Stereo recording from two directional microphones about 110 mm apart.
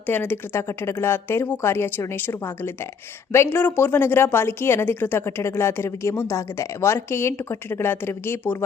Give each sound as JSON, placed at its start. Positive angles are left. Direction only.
{"t": 0.0, "sound": "a woman's voice", "side_deg": 15}